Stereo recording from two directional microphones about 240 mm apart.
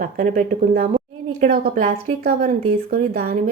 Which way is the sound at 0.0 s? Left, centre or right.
Right.